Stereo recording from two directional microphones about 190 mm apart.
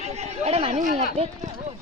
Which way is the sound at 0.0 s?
35° right (ahead or behind).